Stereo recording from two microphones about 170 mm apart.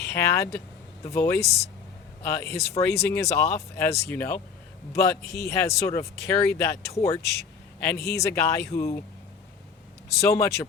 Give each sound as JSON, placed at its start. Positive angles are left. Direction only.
{"t": 0.0, "sound": "speech", "side_deg": 15}
{"t": 7.2, "sound": "a man's voice", "side_deg": 75}
{"t": 7.8, "sound": "a man's voice", "side_deg": 10}
{"t": 10.2, "sound": "speech", "side_deg": 15}